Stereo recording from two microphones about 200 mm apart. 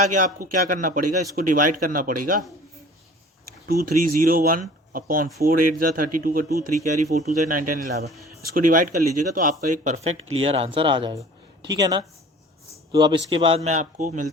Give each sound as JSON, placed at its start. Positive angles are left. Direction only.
{"t": 0.1, "sound": "speech", "side_deg": -40}
{"t": 3.7, "sound": "a man's voice", "side_deg": -45}